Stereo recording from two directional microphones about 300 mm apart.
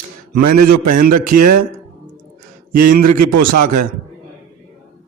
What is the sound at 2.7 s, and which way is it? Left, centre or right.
Speech, right.